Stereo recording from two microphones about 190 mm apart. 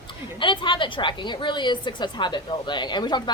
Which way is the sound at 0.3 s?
25° left (ahead or behind).